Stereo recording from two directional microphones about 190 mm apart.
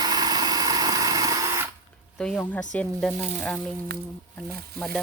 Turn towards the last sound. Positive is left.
turn(degrees=5)  # may be behind; listen again after turning